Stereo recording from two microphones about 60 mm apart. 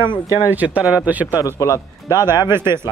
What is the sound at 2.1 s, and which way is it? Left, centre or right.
Speech, right.